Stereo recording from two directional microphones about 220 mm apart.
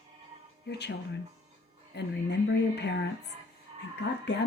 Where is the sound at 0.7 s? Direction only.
50° left (ahead or behind).